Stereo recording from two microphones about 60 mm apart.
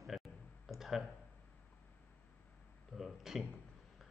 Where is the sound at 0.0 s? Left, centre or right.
Centre.